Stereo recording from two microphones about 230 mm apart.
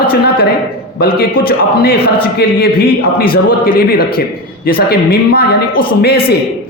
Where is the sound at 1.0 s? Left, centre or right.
Left.